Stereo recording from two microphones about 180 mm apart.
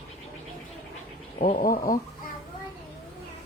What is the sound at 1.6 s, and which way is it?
Speech, 55° left (ahead or behind).